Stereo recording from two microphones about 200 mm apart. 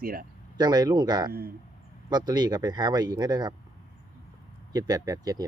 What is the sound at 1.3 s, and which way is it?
Speech, 50° right (ahead or behind).